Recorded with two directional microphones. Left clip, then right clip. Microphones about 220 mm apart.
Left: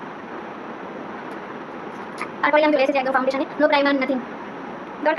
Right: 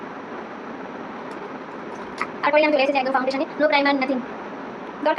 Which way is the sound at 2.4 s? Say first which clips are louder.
Left 1 dB; 15° left (ahead or behind).